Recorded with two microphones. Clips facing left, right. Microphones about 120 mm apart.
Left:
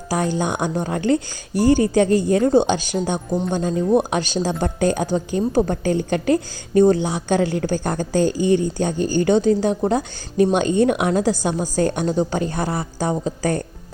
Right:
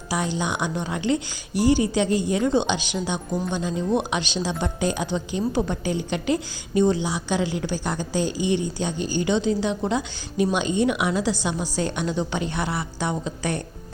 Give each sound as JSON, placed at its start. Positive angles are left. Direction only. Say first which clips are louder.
{"t": 0.1, "sound": "a woman's voice", "louder": "left 4 dB", "side_deg": 45}